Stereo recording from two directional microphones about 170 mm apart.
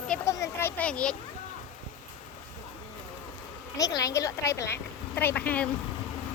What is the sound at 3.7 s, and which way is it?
Speech, 20° left (ahead or behind).